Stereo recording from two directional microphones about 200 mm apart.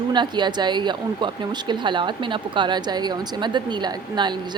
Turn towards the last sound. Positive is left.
turn(degrees=-20)  # may be behind; listen again after turning